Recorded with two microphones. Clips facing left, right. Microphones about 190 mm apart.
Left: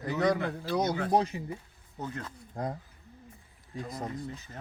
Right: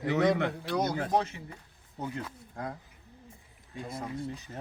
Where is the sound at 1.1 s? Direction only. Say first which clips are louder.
Left 3 dB; 35° left (ahead or behind).